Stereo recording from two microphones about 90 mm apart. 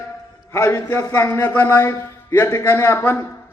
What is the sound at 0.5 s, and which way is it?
A man's voice, 30° left (ahead or behind).